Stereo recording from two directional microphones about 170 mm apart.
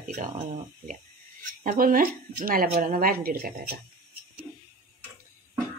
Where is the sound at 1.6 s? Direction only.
55° right (ahead or behind).